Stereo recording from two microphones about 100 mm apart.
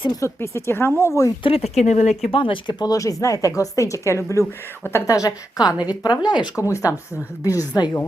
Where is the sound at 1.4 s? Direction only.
80° left.